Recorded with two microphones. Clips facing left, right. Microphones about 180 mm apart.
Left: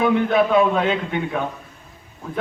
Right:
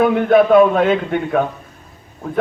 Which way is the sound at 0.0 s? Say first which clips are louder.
Right 5 dB; 55° right (ahead or behind).